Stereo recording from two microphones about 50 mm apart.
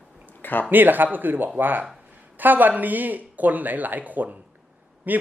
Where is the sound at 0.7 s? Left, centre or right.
Right.